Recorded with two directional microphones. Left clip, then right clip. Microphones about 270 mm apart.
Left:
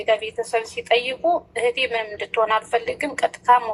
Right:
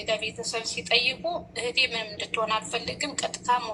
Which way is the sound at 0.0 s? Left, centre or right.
Left.